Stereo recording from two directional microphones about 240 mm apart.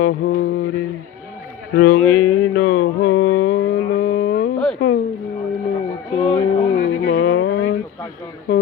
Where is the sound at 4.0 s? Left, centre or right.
Left.